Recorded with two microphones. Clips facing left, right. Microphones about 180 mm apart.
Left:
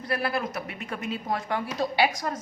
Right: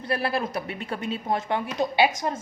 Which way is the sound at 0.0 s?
30° right (ahead or behind).